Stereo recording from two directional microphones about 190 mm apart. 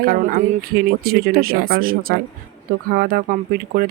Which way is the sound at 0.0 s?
50° right (ahead or behind).